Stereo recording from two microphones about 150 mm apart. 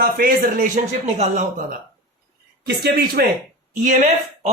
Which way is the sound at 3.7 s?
55° right (ahead or behind).